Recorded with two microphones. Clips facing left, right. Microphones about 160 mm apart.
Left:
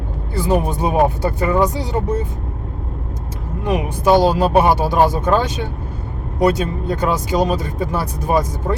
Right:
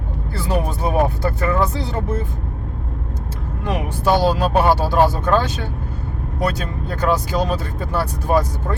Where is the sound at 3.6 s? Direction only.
15° left (ahead or behind).